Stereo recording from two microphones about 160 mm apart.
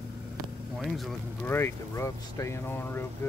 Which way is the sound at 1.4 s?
15° left (ahead or behind).